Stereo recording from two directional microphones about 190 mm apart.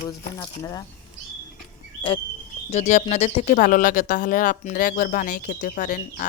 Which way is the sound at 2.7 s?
35° left (ahead or behind).